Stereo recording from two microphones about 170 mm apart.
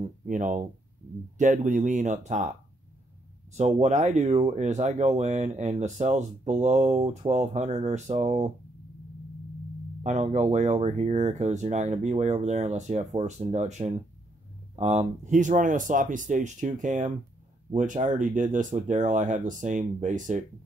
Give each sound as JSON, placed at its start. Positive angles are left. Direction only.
{"t": 0.0, "sound": "a sound", "side_deg": -45}
{"t": 1.4, "sound": "speech", "side_deg": -50}
{"t": 3.5, "sound": "speech", "side_deg": -40}
{"t": 10.0, "sound": "speech", "side_deg": -40}